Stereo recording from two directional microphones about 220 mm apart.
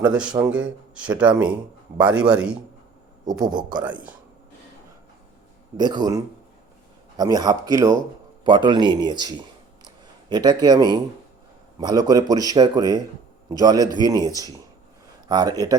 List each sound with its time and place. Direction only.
0.0 s speech: 5° right (ahead or behind)
3.4 s a man's voice: 20° right (ahead or behind)
5.7 s a man's voice: 20° right (ahead or behind)